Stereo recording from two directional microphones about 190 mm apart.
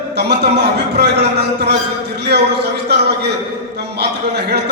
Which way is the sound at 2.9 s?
60° right (ahead or behind).